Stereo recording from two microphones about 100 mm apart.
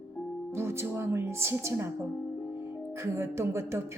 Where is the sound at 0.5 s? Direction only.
25° right (ahead or behind).